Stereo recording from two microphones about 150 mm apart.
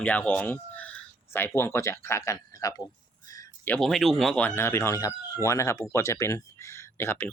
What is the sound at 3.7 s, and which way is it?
Speech, centre (ahead or behind).